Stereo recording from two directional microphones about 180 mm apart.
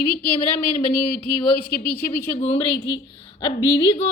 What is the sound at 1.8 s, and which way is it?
Speech, 10° left (ahead or behind).